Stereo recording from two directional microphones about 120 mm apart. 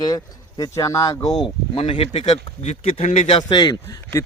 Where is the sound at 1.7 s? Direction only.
50° left (ahead or behind).